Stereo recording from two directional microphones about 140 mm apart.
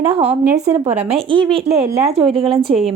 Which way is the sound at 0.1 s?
45° right (ahead or behind).